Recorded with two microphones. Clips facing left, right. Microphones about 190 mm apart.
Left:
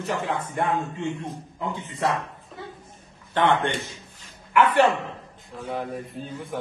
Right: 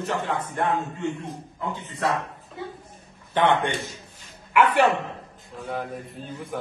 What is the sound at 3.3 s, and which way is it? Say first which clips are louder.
Speech: even; 20° right (ahead or behind).